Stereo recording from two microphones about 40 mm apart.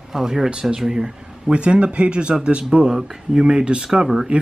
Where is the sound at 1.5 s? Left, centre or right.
Right; by 4.2 s centre.